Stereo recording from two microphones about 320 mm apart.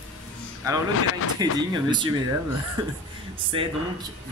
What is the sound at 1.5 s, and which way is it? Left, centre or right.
Speech, centre.